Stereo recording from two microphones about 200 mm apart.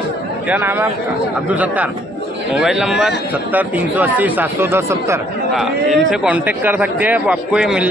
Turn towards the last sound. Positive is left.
turn(degrees=-5)  # may be behind; listen again after turning